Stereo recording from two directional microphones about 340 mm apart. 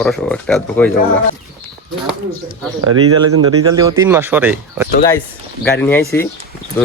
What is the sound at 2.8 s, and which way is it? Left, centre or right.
Speech, right.